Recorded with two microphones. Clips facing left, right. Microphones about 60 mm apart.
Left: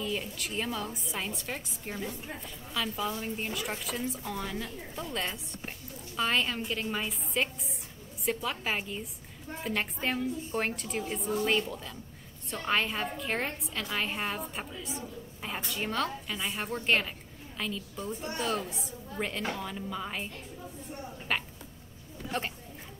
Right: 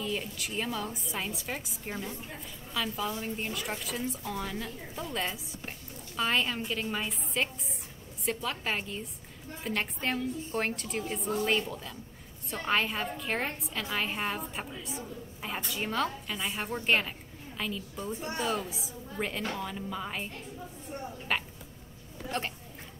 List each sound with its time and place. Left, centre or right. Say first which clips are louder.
0.0 s a woman's voice: even; centre
18.1 s a woman's voice: right 2 dB; centre
18.4 s a woman's voice: even; centre
21.3 s a sound: even; centre
22.3 s a woman's voice: even; centre